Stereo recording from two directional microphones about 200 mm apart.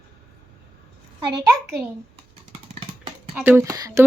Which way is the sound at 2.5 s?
25° right (ahead or behind).